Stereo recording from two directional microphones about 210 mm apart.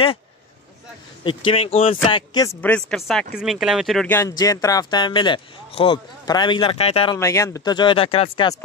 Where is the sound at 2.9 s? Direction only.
Centre (ahead or behind); by 7.2 s 25° left (ahead or behind).